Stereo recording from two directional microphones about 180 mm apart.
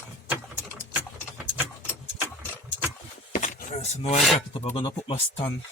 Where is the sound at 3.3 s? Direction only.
45° left (ahead or behind).